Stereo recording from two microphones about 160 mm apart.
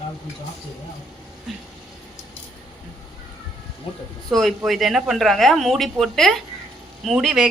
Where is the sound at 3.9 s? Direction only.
35° left (ahead or behind).